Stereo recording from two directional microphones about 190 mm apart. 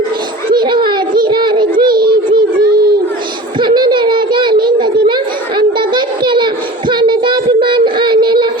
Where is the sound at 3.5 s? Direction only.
25° right (ahead or behind).